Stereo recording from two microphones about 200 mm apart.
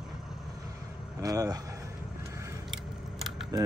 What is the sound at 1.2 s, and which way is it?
Speech, 15° right (ahead or behind).